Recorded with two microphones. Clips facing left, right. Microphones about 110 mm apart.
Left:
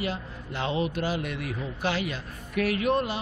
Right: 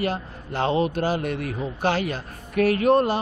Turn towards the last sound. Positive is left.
turn(degrees=-45)  # may be behind; listen again after turning